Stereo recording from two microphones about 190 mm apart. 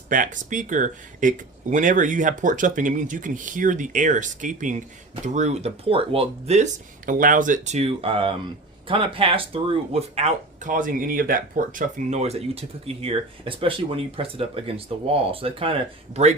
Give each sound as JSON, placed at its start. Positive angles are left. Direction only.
{"t": 0.1, "sound": "speech", "side_deg": -45}